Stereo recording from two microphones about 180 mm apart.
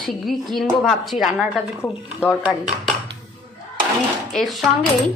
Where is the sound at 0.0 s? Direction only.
Centre (ahead or behind).